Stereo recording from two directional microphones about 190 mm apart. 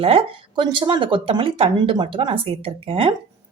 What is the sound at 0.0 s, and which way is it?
Speech, 25° right (ahead or behind).